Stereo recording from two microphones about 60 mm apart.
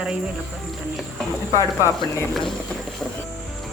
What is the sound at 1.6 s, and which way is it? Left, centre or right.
Speech, left.